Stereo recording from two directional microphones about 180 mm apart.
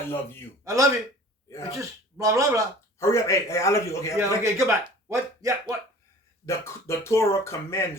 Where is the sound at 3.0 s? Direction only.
15° left (ahead or behind).